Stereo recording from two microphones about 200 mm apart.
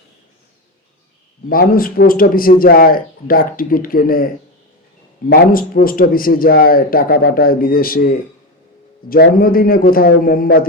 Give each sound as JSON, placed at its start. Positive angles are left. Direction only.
{"t": 1.5, "sound": "a man's voice", "side_deg": 45}
{"t": 5.3, "sound": "a man's voice", "side_deg": 45}